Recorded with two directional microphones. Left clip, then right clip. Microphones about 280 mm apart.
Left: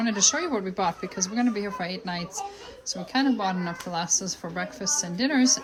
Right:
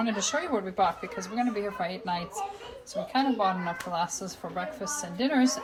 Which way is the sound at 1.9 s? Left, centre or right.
Left.